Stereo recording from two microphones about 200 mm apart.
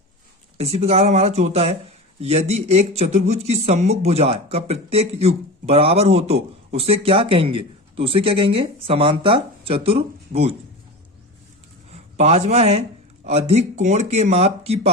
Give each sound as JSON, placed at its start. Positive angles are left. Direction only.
{"t": 0.5, "sound": "speech", "side_deg": -30}
{"t": 11.9, "sound": "speech", "side_deg": -30}